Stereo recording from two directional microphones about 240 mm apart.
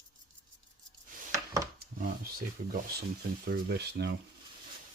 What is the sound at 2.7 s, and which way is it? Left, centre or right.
Speech, right.